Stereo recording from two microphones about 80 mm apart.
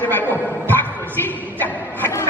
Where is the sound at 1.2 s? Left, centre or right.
Left.